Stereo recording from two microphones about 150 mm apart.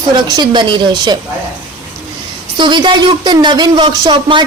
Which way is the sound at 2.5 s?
30° right (ahead or behind).